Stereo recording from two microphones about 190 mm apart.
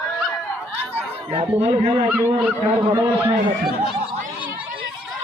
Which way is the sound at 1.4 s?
30° right (ahead or behind).